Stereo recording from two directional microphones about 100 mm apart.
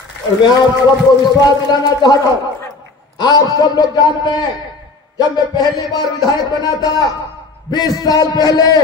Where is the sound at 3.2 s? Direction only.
45° left (ahead or behind).